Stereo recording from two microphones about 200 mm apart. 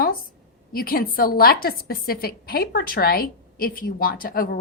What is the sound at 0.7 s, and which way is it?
A woman's voice, 50° left (ahead or behind).